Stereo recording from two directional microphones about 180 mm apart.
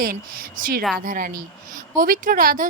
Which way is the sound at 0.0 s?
50° right (ahead or behind).